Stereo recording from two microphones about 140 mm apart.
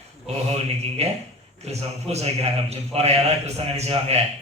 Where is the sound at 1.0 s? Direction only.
50° right (ahead or behind).